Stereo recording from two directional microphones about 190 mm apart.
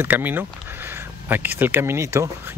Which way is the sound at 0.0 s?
10° right (ahead or behind).